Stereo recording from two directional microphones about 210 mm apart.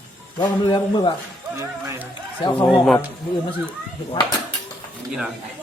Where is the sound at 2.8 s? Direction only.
Centre (ahead or behind).